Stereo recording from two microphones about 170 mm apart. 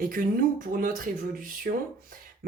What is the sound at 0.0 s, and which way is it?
Speech, 55° right (ahead or behind).